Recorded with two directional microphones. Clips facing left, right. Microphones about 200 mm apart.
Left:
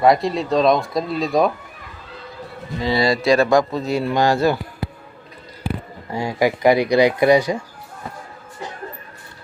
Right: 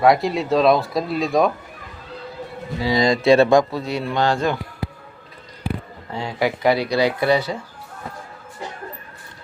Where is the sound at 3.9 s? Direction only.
5° left (ahead or behind).